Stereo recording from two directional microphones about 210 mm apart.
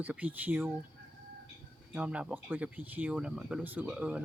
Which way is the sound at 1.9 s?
5° right (ahead or behind).